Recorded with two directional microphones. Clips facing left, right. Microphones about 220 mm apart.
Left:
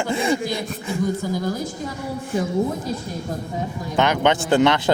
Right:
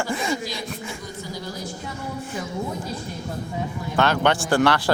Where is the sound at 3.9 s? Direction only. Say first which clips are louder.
Left 2 dB; 20° left (ahead or behind).